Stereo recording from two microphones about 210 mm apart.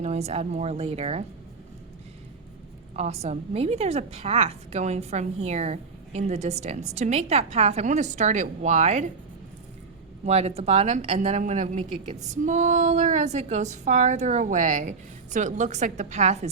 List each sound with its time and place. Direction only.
0.0 s a woman's voice: 30° right (ahead or behind)
2.9 s a woman's voice: 30° right (ahead or behind)
10.2 s a woman's voice: 30° right (ahead or behind)